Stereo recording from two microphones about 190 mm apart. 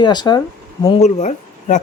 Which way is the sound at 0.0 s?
20° left (ahead or behind).